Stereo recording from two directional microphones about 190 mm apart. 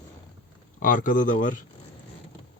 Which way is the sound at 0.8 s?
45° left (ahead or behind).